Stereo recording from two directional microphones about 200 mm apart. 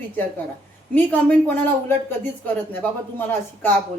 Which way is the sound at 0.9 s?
10° left (ahead or behind).